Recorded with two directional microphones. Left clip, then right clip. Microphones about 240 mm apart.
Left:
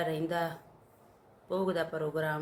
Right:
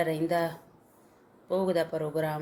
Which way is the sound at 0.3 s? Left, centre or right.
Centre.